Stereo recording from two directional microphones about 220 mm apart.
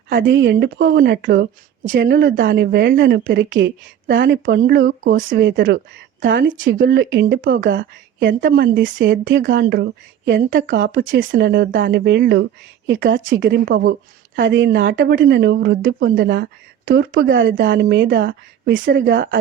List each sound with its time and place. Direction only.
0.1 s a woman's voice: 55° right (ahead or behind)
2.3 s a woman's voice: 40° right (ahead or behind)
8.4 s a woman's voice: 50° right (ahead or behind)
11.3 s a woman's voice: 45° right (ahead or behind)